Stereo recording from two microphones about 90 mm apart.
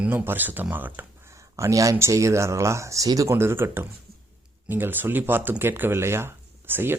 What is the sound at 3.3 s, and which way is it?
Speech, 25° right (ahead or behind).